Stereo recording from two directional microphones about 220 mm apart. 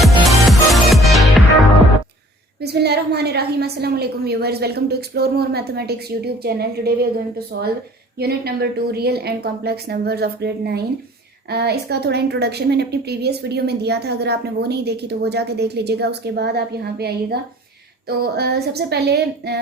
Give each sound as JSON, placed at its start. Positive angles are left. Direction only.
{"t": 0.0, "sound": "music", "side_deg": 0}
{"t": 2.6, "sound": "a woman's voice", "side_deg": -45}